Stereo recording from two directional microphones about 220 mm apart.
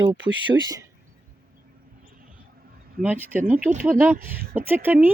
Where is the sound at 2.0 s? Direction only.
40° right (ahead or behind).